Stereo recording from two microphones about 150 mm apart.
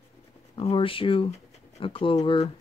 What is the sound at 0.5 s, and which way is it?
Speech, 35° left (ahead or behind).